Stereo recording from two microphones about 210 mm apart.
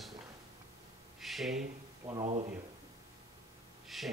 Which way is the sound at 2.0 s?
25° right (ahead or behind).